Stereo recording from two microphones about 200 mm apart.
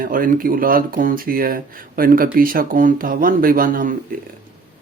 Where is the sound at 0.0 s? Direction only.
45° right (ahead or behind).